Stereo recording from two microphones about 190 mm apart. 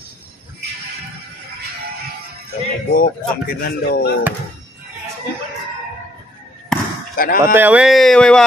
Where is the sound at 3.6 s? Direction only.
55° left (ahead or behind).